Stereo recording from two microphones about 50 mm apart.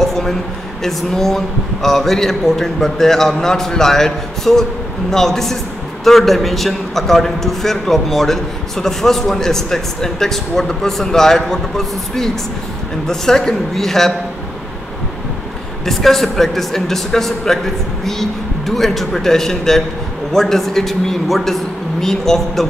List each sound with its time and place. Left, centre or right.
0.0 s a sound: centre
0.8 s a man's voice: centre
15.8 s a man's voice: centre